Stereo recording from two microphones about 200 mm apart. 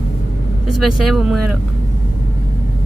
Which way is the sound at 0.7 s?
Centre (ahead or behind).